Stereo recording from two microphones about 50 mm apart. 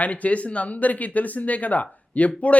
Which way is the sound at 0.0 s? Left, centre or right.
Left.